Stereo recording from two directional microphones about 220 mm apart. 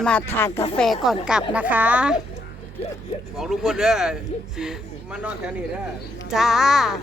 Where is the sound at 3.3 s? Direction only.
Centre (ahead or behind).